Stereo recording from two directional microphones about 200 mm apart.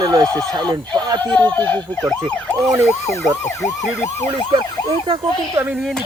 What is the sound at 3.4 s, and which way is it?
Emergency vehicle, 15° left (ahead or behind).